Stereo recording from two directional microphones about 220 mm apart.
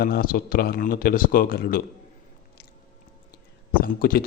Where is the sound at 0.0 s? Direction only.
40° left (ahead or behind).